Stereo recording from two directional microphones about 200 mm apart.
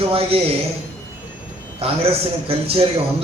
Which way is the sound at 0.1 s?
30° right (ahead or behind).